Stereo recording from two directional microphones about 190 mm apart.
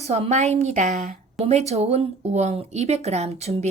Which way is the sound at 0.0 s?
35° right (ahead or behind).